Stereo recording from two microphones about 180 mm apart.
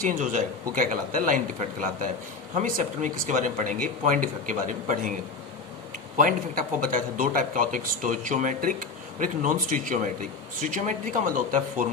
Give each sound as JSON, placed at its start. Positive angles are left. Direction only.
{"t": 0.0, "sound": "speech", "side_deg": -45}
{"t": 6.1, "sound": "speech", "side_deg": -50}